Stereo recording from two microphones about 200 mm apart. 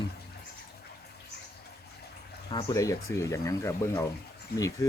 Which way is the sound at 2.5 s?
25° left (ahead or behind).